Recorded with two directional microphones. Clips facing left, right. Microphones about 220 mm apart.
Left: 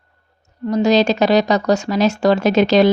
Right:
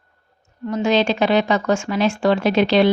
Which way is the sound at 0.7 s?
40° left (ahead or behind).